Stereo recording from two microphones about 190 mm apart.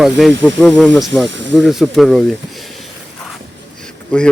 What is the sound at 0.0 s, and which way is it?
Speech, centre (ahead or behind).